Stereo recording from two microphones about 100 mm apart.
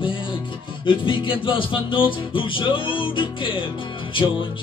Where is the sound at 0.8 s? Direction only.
55° left (ahead or behind).